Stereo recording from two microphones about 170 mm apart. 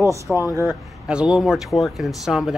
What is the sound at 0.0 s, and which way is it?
Speech, 15° right (ahead or behind).